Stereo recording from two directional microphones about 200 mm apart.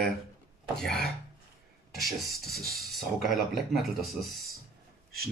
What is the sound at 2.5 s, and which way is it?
Speech, 50° right (ahead or behind).